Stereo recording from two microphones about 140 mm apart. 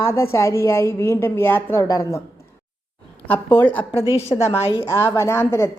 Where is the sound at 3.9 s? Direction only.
40° left (ahead or behind).